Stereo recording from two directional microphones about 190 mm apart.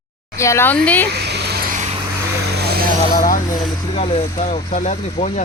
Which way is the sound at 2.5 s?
55° right (ahead or behind).